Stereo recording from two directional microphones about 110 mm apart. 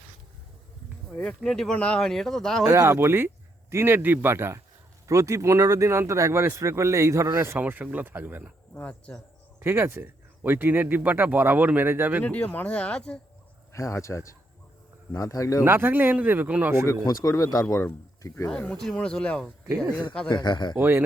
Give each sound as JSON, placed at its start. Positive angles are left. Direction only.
{"t": 1.1, "sound": "speech", "side_deg": 15}
{"t": 2.6, "sound": "speech", "side_deg": -30}
{"t": 8.7, "sound": "speech", "side_deg": 15}
{"t": 9.6, "sound": "speech", "side_deg": -20}
{"t": 12.2, "sound": "speech", "side_deg": 10}
{"t": 13.7, "sound": "speech", "side_deg": 25}
{"t": 15.6, "sound": "speech", "side_deg": -20}
{"t": 16.8, "sound": "speech", "side_deg": 30}
{"t": 18.4, "sound": "speech", "side_deg": 10}
{"t": 19.6, "sound": "speech", "side_deg": -25}
{"t": 20.2, "sound": "speech", "side_deg": 40}
{"t": 20.7, "sound": "speech", "side_deg": -20}